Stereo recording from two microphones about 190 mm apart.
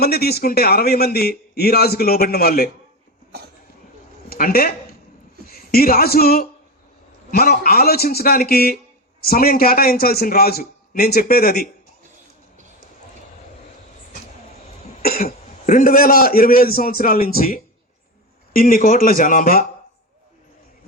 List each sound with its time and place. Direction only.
0.0 s a man's voice: 55° left (ahead or behind)
4.3 s a man's voice: 50° left (ahead or behind)
15.0 s cough: 55° left (ahead or behind)
15.3 s a man's voice: 45° left (ahead or behind)